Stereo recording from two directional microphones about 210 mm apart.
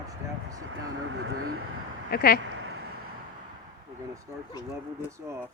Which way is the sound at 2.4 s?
65° right (ahead or behind).